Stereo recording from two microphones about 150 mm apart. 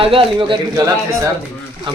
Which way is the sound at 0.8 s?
20° right (ahead or behind).